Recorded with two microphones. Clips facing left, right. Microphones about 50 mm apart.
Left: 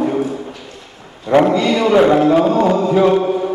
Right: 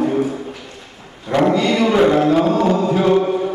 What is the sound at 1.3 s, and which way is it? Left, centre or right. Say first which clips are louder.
Speech: left 5 dB; centre.